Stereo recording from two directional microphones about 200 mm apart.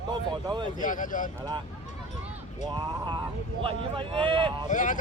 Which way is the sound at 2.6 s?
25° right (ahead or behind).